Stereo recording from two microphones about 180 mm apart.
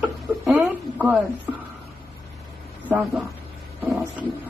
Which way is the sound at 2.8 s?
10° right (ahead or behind).